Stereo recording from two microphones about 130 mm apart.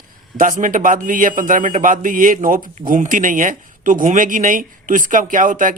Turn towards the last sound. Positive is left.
turn(degrees=-90)